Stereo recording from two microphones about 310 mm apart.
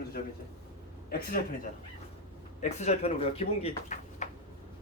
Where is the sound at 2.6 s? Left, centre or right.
Left.